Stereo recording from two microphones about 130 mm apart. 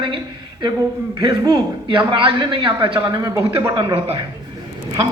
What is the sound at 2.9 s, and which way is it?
Speech, 25° right (ahead or behind).